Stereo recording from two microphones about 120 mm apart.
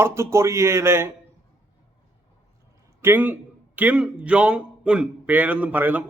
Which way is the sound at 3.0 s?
15° right (ahead or behind).